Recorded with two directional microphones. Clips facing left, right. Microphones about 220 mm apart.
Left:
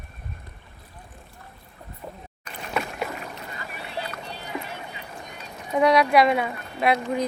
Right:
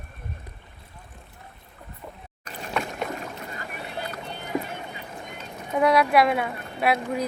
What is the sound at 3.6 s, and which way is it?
Rowboat, 50° right (ahead or behind).